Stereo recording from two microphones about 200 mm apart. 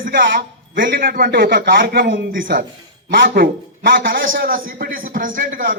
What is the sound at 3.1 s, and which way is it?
Speech, 45° right (ahead or behind).